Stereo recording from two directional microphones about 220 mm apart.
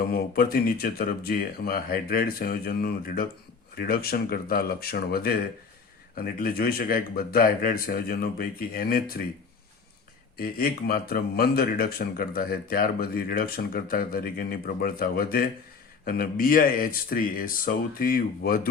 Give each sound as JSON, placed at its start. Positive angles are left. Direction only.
{"t": 0.0, "sound": "speech", "side_deg": 45}
{"t": 10.3, "sound": "speech", "side_deg": 45}